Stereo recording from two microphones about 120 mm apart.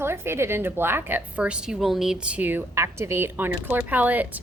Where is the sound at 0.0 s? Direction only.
20° right (ahead or behind).